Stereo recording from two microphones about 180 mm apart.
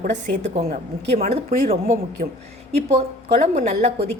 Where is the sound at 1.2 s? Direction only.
35° right (ahead or behind).